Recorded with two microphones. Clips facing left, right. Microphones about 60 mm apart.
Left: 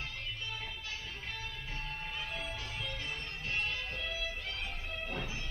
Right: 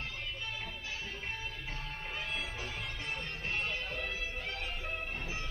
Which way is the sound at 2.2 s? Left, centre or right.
Right.